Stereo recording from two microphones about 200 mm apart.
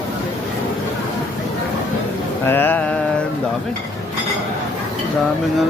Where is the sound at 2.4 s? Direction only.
10° left (ahead or behind).